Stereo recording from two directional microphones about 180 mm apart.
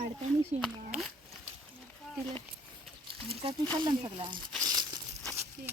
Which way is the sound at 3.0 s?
30° right (ahead or behind).